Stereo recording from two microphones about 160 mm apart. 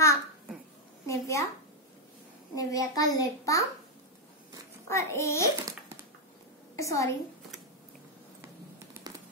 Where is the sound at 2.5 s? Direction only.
20° left (ahead or behind).